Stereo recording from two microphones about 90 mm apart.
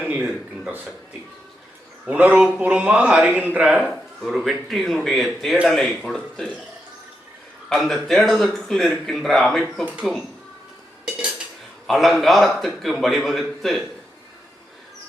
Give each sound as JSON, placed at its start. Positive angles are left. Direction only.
{"t": 0.0, "sound": "a man's voice", "side_deg": -15}
{"t": 2.0, "sound": "a man's voice", "side_deg": -15}
{"t": 3.6, "sound": "a man's voice", "side_deg": -5}
{"t": 7.7, "sound": "a man's voice", "side_deg": 5}
{"t": 11.9, "sound": "a man's voice", "side_deg": 0}